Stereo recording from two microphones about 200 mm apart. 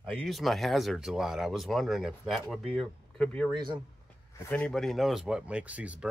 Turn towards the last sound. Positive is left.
turn(degrees=-5)  # may be behind; listen again after turning